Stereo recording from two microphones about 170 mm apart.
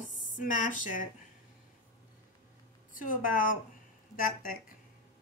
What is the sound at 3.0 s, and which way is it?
Speech, 55° left (ahead or behind).